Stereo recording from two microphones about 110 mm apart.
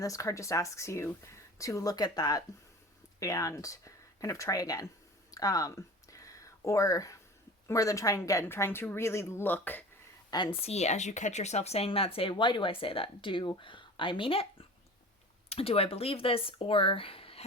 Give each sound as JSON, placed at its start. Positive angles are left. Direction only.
{"t": 0.0, "sound": "speech", "side_deg": 30}
{"t": 5.3, "sound": "a sound", "side_deg": 35}
{"t": 7.7, "sound": "speech", "side_deg": 30}
{"t": 10.3, "sound": "a woman's voice", "side_deg": 45}
{"t": 10.6, "sound": "speech", "side_deg": 80}
{"t": 15.4, "sound": "speech", "side_deg": 60}